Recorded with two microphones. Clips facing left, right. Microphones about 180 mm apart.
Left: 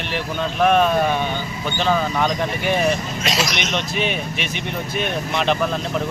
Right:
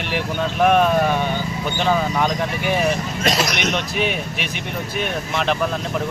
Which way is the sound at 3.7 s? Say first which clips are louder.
Right 1 dB; 5° right (ahead or behind).